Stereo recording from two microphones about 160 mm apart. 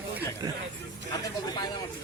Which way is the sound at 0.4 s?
20° right (ahead or behind).